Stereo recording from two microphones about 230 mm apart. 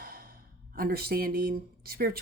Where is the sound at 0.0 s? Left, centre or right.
Right.